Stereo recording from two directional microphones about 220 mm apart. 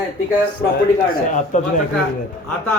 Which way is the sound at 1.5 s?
35° left (ahead or behind).